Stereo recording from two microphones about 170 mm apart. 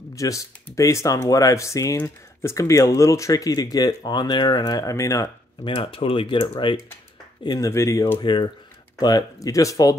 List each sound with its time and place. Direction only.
0.1 s speech: 20° left (ahead or behind)
5.8 s speech: 30° left (ahead or behind)